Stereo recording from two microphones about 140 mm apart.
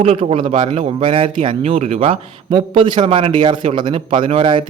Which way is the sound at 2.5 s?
35° right (ahead or behind).